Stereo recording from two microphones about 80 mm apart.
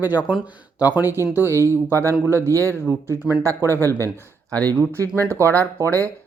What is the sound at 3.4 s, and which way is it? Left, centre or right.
Speech, right.